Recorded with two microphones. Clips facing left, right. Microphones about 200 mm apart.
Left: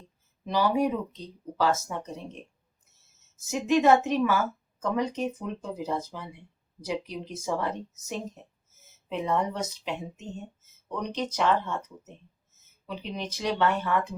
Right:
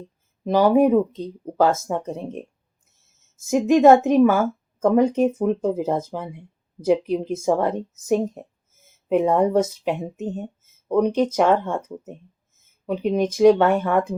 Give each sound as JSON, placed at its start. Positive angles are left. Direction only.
{"t": 0.4, "sound": "a woman's voice", "side_deg": -50}
{"t": 3.4, "sound": "a woman's voice", "side_deg": -50}
{"t": 8.7, "sound": "a sound", "side_deg": -50}
{"t": 9.8, "sound": "a woman's voice", "side_deg": -50}